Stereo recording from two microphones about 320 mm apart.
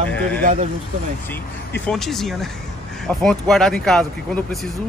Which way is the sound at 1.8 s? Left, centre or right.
Centre.